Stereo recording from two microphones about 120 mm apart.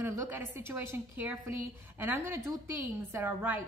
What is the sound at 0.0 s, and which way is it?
A woman's voice, 20° right (ahead or behind).